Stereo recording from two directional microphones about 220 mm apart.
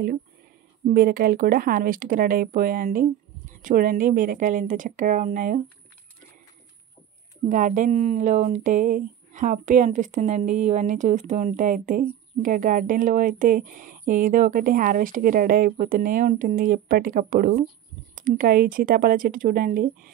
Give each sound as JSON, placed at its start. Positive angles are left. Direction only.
{"t": 0.8, "sound": "speech", "side_deg": -40}
{"t": 7.4, "sound": "speech", "side_deg": -35}